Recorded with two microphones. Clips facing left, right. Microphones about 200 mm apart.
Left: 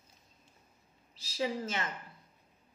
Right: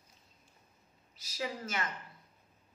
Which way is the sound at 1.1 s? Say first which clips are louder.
Left 5 dB; 30° left (ahead or behind).